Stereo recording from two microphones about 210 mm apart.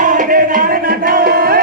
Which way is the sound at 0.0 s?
40° right (ahead or behind).